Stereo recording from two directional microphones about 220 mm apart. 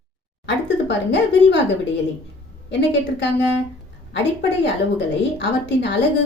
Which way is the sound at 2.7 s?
50° left (ahead or behind).